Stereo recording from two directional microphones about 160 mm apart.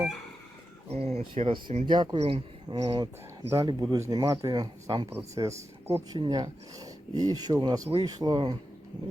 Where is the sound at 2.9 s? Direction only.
20° right (ahead or behind).